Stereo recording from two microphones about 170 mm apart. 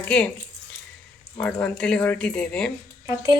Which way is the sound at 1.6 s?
5° left (ahead or behind).